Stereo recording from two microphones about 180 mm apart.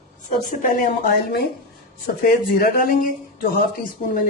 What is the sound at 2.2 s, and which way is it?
Speech, 55° left (ahead or behind).